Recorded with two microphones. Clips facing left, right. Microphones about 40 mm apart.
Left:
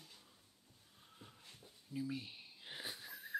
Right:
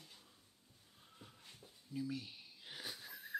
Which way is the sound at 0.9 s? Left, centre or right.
Centre.